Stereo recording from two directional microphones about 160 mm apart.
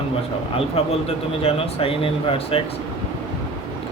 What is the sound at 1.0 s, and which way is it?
Speech, 40° left (ahead or behind).